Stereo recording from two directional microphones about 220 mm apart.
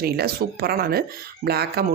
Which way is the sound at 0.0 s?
45° right (ahead or behind).